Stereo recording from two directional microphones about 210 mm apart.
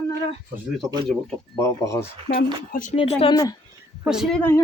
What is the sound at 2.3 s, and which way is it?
Speech, 45° left (ahead or behind).